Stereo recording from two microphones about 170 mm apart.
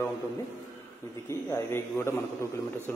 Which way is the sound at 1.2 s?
15° left (ahead or behind).